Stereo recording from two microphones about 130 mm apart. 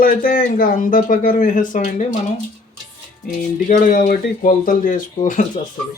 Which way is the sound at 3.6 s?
90° left.